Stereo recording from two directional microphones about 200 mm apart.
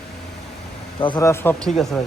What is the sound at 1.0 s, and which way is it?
Speech, 25° left (ahead or behind).